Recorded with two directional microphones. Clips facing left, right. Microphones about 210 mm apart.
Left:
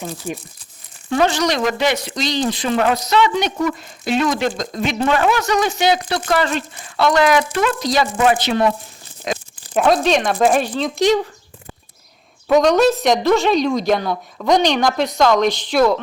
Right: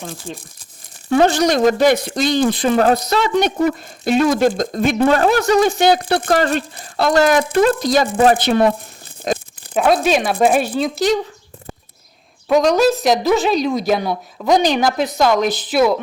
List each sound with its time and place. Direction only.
1.3 s speech: 50° right (ahead or behind)
2.7 s a woman's voice: 35° right (ahead or behind)
3.0 s speech: 45° right (ahead or behind)
5.6 s speech: 50° right (ahead or behind)
6.7 s speech: 40° right (ahead or behind)
8.1 s a woman's voice: 35° right (ahead or behind)
8.4 s speech: 55° right (ahead or behind)
9.7 s speech: 5° right (ahead or behind)
12.5 s a woman's voice: centre (ahead or behind)